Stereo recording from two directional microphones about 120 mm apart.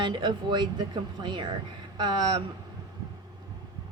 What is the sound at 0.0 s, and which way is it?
A woman's voice, 40° right (ahead or behind).